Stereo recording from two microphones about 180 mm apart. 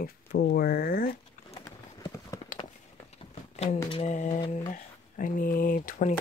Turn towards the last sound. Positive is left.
turn(degrees=45)  # may be behind; listen again after turning